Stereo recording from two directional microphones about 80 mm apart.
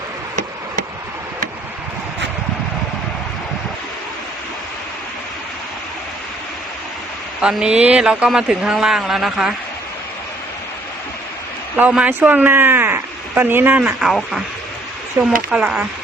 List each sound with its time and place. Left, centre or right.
7.4 s speech: centre
11.8 s speech: centre
14.0 s speech: centre
15.4 s speech: centre